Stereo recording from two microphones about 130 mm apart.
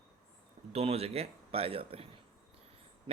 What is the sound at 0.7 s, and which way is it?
Speech, 50° right (ahead or behind).